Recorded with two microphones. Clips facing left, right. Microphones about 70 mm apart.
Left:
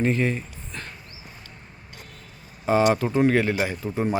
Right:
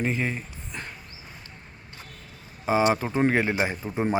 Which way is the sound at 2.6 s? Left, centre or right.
Centre.